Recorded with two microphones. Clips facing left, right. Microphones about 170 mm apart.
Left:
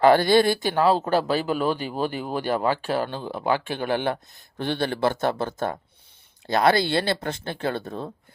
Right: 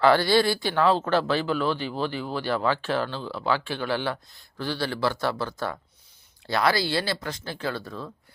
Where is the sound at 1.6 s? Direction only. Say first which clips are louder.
Left 2 dB; 40° left (ahead or behind).